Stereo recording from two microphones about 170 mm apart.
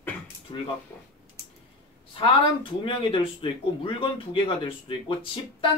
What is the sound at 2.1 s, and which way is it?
Speech, 30° left (ahead or behind).